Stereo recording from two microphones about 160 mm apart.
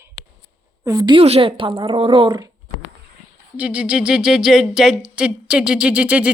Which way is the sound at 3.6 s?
5° right (ahead or behind).